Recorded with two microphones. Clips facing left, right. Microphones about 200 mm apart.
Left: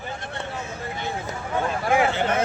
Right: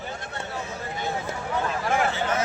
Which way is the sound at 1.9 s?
55° left (ahead or behind).